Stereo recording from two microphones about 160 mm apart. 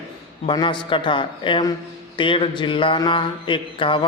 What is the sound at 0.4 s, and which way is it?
Speech, 30° left (ahead or behind).